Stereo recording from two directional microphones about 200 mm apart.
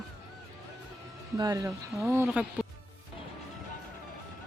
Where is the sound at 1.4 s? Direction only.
20° right (ahead or behind).